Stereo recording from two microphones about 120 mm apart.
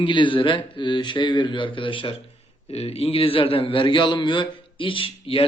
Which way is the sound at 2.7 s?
55° left (ahead or behind).